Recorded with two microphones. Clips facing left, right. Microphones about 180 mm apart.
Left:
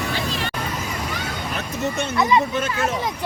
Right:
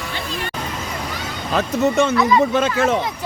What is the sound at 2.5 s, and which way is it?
Speech, 90° right.